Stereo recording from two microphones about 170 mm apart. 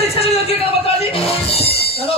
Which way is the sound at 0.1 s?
35° left (ahead or behind).